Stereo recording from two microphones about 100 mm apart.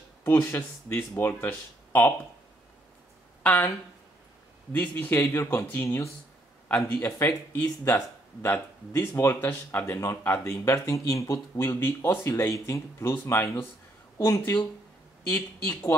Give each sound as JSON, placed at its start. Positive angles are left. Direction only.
{"t": 0.2, "sound": "speech", "side_deg": 25}
{"t": 4.7, "sound": "speech", "side_deg": 15}
{"t": 10.6, "sound": "speech", "side_deg": 35}
{"t": 11.7, "sound": "speech", "side_deg": 25}